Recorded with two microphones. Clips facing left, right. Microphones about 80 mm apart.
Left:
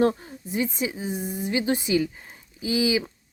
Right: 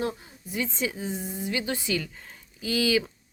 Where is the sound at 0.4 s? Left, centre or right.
Left.